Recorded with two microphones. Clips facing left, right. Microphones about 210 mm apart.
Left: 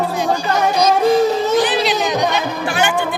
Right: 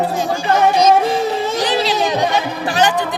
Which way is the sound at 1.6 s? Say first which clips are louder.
Left 1 dB; 35° right (ahead or behind).